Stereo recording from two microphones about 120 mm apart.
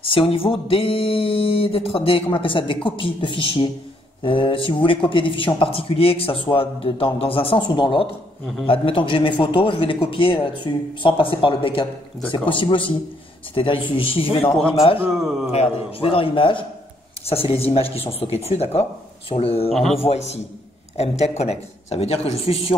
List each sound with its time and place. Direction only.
0.0 s speech: 50° left (ahead or behind)
15.0 s a man's voice: centre (ahead or behind)
15.5 s speech: 55° left (ahead or behind)
19.7 s a man's voice: centre (ahead or behind)
20.0 s speech: 60° left (ahead or behind)